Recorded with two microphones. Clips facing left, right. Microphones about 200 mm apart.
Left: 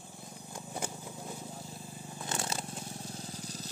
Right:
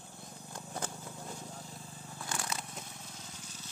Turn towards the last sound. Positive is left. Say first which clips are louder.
# left 8 dB
turn(degrees=35)  # may be behind; listen again after turning